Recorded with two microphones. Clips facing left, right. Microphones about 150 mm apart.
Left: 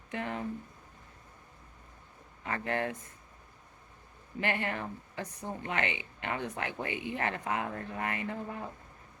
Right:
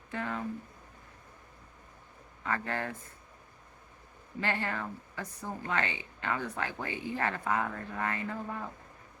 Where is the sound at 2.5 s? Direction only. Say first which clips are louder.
Left 1 dB; 25° left (ahead or behind).